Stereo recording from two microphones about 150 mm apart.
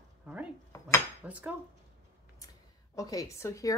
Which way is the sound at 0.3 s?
5° right (ahead or behind).